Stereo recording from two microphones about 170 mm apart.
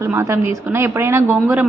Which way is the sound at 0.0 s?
15° right (ahead or behind).